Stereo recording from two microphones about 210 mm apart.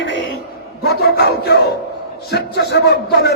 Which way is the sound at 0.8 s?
50° left (ahead or behind).